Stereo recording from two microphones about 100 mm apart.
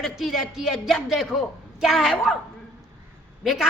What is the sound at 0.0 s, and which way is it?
A woman's voice, 5° right (ahead or behind).